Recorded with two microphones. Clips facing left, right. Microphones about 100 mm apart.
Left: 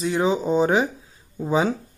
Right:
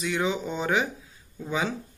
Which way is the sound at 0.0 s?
35° left (ahead or behind).